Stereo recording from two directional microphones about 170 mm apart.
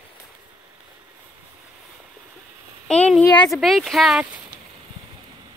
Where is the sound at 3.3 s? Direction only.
20° left (ahead or behind).